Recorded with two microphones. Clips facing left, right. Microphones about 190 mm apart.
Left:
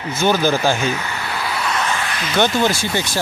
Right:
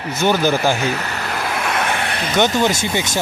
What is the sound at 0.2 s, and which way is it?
Speech, 15° right (ahead or behind).